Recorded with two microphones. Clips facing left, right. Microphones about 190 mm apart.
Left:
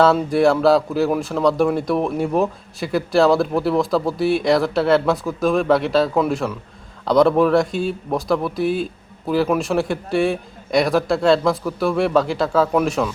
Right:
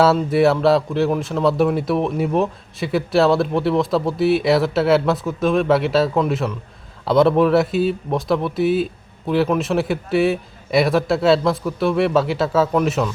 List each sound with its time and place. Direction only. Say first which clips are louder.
0.3 s speech: even; centre (ahead or behind)